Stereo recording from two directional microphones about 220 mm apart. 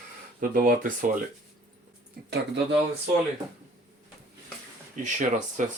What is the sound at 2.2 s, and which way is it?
Speech, 50° right (ahead or behind).